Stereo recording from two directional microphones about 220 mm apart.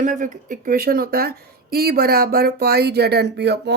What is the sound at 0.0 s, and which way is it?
A woman's voice, 35° right (ahead or behind).